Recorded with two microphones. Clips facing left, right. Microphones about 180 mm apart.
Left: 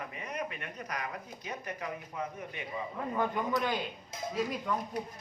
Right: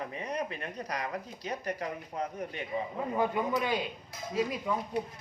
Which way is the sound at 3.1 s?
10° right (ahead or behind).